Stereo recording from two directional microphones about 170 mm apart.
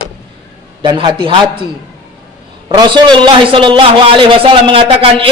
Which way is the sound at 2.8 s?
25° right (ahead or behind).